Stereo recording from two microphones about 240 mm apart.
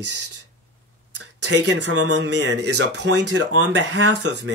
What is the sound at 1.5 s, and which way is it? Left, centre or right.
Speech, right.